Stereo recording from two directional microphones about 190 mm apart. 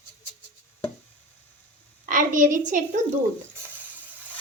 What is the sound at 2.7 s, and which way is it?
Speech, 40° right (ahead or behind).